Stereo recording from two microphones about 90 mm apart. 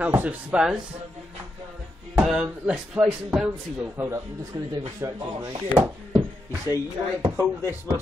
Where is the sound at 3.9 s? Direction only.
30° right (ahead or behind).